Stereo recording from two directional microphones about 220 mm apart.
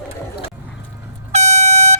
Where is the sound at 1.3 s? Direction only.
30° right (ahead or behind).